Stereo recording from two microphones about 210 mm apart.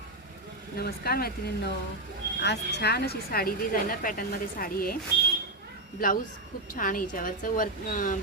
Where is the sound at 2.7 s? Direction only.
50° left (ahead or behind).